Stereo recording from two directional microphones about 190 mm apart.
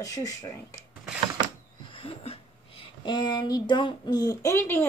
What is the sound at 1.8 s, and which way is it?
Speech, 30° left (ahead or behind).